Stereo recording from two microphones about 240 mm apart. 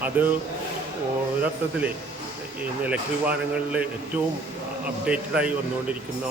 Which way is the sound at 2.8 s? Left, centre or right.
Centre.